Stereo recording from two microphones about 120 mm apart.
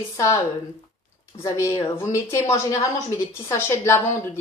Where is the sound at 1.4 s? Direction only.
25° left (ahead or behind).